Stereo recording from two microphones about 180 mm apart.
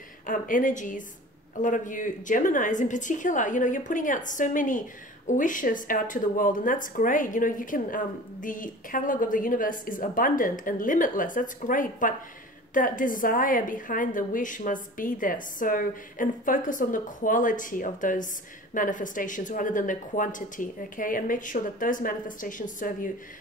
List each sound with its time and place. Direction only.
0.3 s a woman's voice: 50° left (ahead or behind)